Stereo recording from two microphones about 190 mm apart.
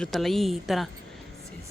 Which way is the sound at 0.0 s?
Centre (ahead or behind).